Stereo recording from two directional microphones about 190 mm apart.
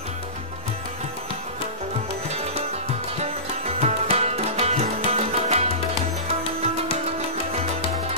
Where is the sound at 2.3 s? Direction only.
35° right (ahead or behind).